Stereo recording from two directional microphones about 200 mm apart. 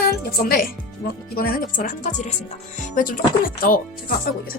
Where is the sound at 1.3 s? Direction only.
45° left (ahead or behind).